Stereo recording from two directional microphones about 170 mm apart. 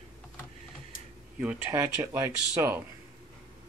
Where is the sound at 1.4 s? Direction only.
10° right (ahead or behind).